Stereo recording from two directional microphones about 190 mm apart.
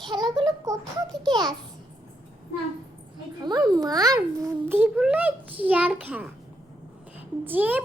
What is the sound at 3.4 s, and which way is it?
A child's voice, 20° right (ahead or behind).